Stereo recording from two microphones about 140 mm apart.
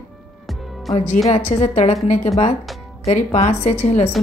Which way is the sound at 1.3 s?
50° left (ahead or behind).